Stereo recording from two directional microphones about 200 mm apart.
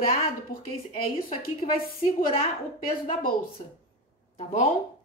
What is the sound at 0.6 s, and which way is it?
A woman's voice, 25° left (ahead or behind).